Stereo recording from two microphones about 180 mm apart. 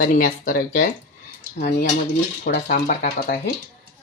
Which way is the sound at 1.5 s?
65° left (ahead or behind).